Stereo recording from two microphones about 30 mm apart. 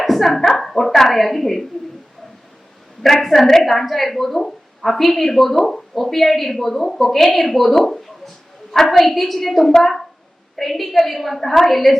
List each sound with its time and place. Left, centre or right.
0.0 s speech: centre
3.0 s a woman's voice: centre
7.8 s a woman's voice: centre
9.1 s a woman's voice: centre